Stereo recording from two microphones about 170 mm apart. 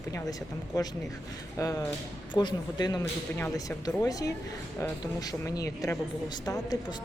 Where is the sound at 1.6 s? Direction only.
20° left (ahead or behind).